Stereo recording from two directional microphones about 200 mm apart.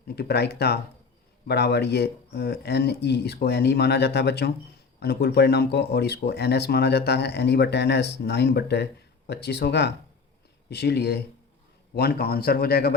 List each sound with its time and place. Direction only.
0.2 s a man's voice: 55° left (ahead or behind)